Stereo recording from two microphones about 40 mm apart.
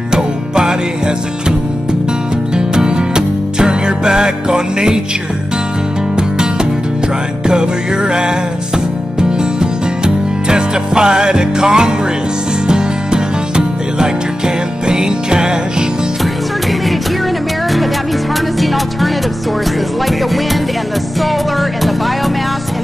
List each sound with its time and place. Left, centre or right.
0.1 s music: centre
2.5 s music: centre
6.1 s music: centre
9.4 s music: right
21.2 s music: centre